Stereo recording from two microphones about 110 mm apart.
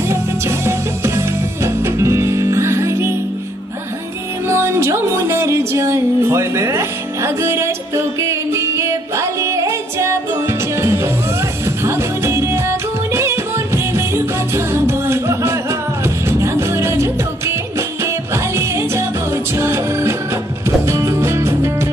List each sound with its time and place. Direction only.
0.1 s music: 25° right (ahead or behind)
4.4 s music: 25° right (ahead or behind)